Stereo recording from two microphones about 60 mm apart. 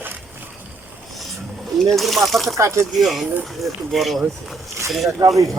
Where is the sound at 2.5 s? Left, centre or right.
Right.